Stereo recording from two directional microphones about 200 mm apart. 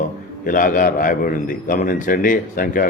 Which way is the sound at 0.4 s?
45° left (ahead or behind).